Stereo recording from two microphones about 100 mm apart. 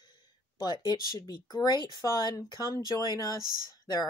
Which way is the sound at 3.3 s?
40° right (ahead or behind).